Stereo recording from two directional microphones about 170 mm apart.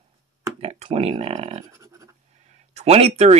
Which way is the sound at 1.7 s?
20° right (ahead or behind).